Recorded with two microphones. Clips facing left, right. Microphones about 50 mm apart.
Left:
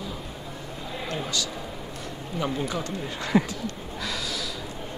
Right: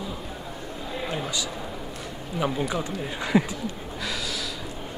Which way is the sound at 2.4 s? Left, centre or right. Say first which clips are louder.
Right 2 dB; centre.